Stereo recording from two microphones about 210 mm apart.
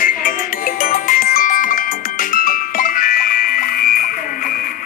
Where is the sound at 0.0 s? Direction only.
40° left (ahead or behind).